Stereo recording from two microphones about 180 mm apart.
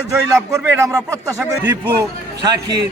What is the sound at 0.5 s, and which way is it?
Speech, 15° right (ahead or behind).